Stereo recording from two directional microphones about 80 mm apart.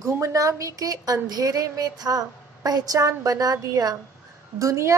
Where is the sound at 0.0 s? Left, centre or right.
Right.